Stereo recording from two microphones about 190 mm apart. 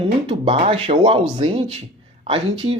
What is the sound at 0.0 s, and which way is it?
Speech, 30° right (ahead or behind).